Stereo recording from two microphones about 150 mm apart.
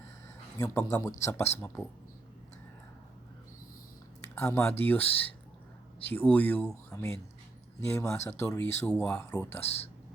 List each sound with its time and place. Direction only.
0.6 s speech: 20° left (ahead or behind)
4.4 s speech: 15° left (ahead or behind)
6.1 s speech: 10° left (ahead or behind)
9.6 s speech: 45° left (ahead or behind)